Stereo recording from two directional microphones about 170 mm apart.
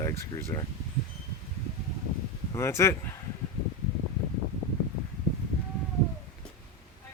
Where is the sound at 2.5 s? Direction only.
15° left (ahead or behind).